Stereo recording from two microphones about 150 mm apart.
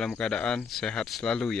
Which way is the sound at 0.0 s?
5° left (ahead or behind).